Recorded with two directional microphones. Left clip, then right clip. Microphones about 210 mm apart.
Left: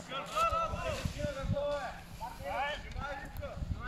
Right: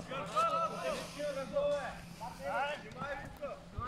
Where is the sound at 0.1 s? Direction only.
5° left (ahead or behind).